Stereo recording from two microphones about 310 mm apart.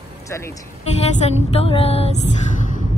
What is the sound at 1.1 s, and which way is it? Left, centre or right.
Music, centre.